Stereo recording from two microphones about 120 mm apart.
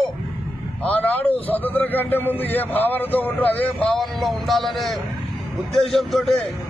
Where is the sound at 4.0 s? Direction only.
Centre (ahead or behind).